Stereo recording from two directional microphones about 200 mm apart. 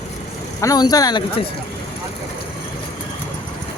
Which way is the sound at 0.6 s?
20° left (ahead or behind).